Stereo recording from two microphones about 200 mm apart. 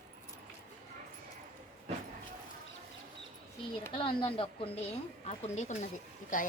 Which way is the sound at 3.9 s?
25° left (ahead or behind).